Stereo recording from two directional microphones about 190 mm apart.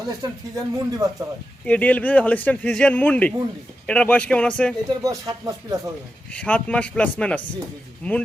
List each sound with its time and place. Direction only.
0.0 s speech: 20° right (ahead or behind)
1.6 s a man's voice: 5° left (ahead or behind)
4.9 s speech: 20° right (ahead or behind)
6.3 s a man's voice: 5° left (ahead or behind)